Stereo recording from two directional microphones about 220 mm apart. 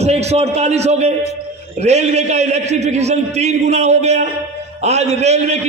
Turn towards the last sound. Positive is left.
turn(degrees=-30)  # may be behind; listen again after turning